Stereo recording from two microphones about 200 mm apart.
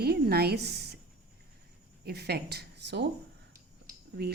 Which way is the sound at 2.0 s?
55° right (ahead or behind).